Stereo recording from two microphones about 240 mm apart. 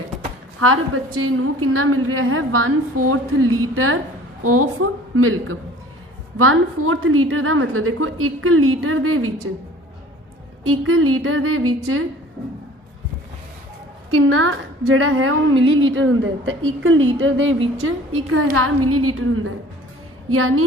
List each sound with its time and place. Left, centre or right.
0.6 s a woman's voice: right
10.7 s a woman's voice: right
14.1 s a woman's voice: right